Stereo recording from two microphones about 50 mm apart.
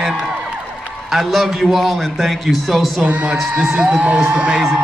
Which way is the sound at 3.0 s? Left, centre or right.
Right.